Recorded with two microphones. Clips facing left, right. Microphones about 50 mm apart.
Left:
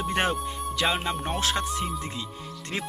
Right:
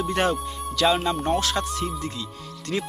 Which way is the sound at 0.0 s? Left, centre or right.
Left.